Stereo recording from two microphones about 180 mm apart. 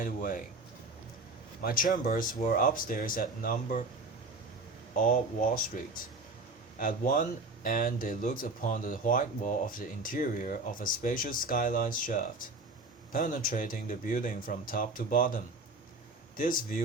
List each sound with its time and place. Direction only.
0.0 s speech: 50° left (ahead or behind)
1.6 s speech: 50° left (ahead or behind)
4.9 s speech: 50° left (ahead or behind)